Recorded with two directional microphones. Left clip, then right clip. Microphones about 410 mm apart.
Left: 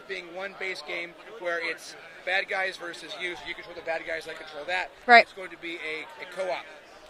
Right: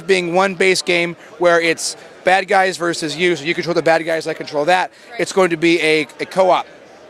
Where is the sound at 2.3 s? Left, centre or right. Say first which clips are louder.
Right 14 dB; right.